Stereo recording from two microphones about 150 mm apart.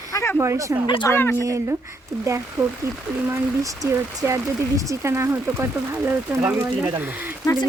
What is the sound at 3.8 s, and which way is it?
Speech, 20° right (ahead or behind).